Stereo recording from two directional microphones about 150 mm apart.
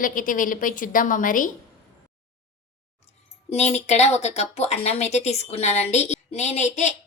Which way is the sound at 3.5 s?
45° left (ahead or behind).